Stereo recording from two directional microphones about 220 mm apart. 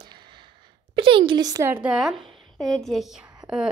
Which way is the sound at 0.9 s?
25° right (ahead or behind).